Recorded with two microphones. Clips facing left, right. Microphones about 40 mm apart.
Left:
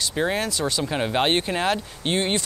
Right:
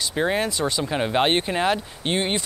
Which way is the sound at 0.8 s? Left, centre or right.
Centre.